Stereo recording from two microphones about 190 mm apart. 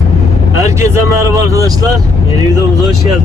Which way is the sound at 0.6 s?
15° right (ahead or behind).